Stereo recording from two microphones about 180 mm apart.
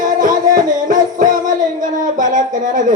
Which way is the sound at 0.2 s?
45° right (ahead or behind).